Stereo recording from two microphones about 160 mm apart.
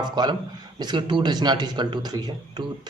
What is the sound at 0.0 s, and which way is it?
Speech, 25° right (ahead or behind).